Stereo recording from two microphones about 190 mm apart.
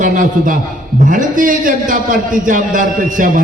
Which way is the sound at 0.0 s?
45° right (ahead or behind).